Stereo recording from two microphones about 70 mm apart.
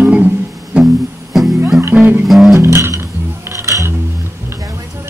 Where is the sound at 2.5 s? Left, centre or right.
Right.